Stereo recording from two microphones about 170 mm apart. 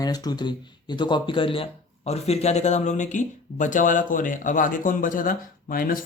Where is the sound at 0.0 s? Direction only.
20° left (ahead or behind).